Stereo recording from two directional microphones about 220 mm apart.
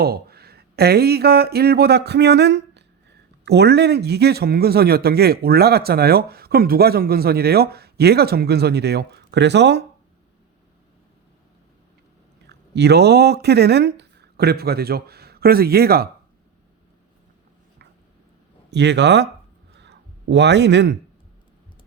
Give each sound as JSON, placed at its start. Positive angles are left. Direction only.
{"t": 0.0, "sound": "speech", "side_deg": -45}
{"t": 12.5, "sound": "speech", "side_deg": -50}
{"t": 18.7, "sound": "speech", "side_deg": -50}
{"t": 19.7, "sound": "a sound", "side_deg": -50}